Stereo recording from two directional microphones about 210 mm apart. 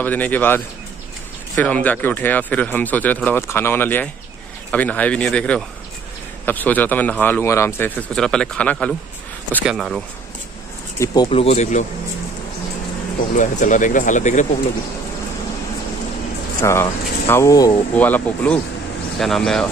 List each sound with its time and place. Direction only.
0.0 s speech: 10° left (ahead or behind)
11.0 s speech: 20° left (ahead or behind)
13.4 s speech: 35° left (ahead or behind)
16.6 s speech: 10° left (ahead or behind)